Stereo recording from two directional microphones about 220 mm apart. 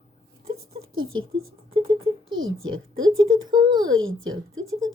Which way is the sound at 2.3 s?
65° right (ahead or behind).